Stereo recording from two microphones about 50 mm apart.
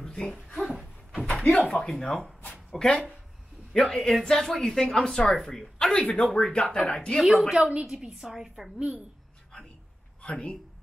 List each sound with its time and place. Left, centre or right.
0.0 s a sound: centre
1.3 s speech: left; by 2.3 s centre
2.8 s speech: centre
3.8 s speech: centre
5.9 s speech: left
7.2 s a woman's voice: centre
7.5 s a woman's voice: right
8.7 s a woman's voice: right
10.2 s speech: left